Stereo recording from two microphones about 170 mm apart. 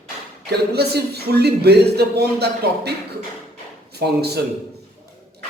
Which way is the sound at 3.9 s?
70° right (ahead or behind).